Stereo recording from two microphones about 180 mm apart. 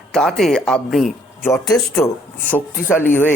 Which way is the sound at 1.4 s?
15° left (ahead or behind).